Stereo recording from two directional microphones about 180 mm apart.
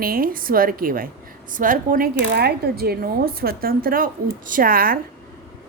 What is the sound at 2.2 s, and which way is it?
Speech, 65° right (ahead or behind).